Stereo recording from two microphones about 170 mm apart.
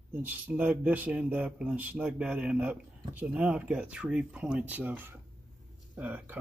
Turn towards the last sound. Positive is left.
turn(degrees=-10)  # may be behind; listen again after turning